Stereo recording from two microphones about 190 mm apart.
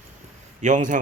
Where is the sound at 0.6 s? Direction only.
40° right (ahead or behind).